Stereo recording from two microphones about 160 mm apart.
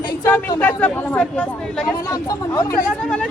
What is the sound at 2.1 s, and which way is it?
Speech, 20° left (ahead or behind).